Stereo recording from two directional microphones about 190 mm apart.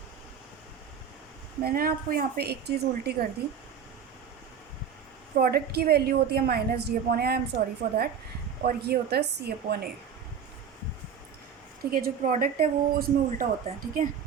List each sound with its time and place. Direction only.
1.6 s a woman's voice: 50° right (ahead or behind)
5.4 s a woman's voice: 55° right (ahead or behind)
11.9 s a woman's voice: 50° right (ahead or behind)